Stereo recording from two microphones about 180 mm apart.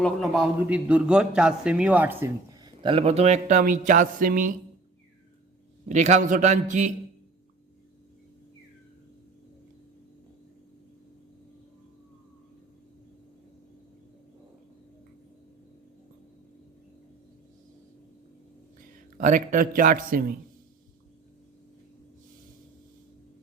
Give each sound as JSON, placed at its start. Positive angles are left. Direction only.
{"t": 0.0, "sound": "a man's voice", "side_deg": 0}
{"t": 5.9, "sound": "a man's voice", "side_deg": -40}
{"t": 19.1, "sound": "a man's voice", "side_deg": -45}